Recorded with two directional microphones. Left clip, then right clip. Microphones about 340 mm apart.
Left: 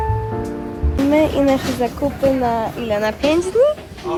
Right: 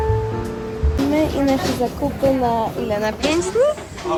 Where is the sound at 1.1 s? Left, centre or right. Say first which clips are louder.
Left 4 dB; centre.